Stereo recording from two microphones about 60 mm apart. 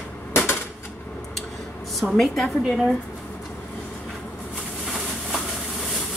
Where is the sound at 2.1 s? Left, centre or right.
Centre.